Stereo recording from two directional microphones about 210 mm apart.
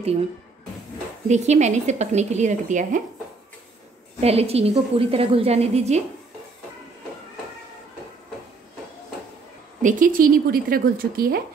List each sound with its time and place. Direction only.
1.2 s a woman's voice: 35° right (ahead or behind)
4.2 s a woman's voice: 30° right (ahead or behind)
9.8 s a woman's voice: 40° right (ahead or behind)